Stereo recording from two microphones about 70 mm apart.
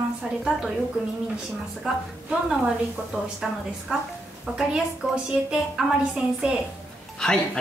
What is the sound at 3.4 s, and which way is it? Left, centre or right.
A woman's voice, centre.